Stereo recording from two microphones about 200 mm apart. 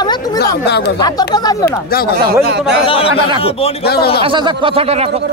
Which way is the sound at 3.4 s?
30° left (ahead or behind).